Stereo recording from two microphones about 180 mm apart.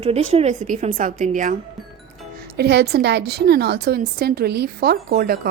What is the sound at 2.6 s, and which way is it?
A woman's voice, 65° right (ahead or behind).